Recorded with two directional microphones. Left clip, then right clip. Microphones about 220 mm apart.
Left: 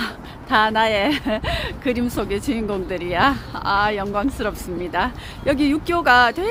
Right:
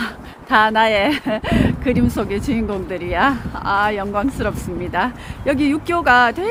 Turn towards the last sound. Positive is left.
turn(degrees=0)  # may be behind; listen again after turning